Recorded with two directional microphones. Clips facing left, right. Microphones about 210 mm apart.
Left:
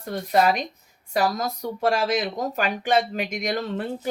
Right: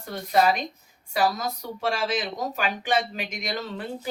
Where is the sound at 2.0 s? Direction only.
40° left (ahead or behind).